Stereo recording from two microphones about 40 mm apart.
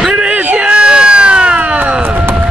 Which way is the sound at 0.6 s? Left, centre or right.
Right.